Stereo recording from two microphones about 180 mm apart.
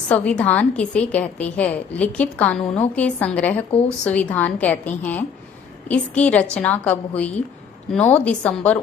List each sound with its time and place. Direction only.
0.1 s a woman's voice: 5° left (ahead or behind)